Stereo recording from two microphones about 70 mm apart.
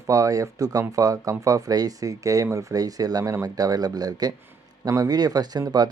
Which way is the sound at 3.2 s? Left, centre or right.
Right.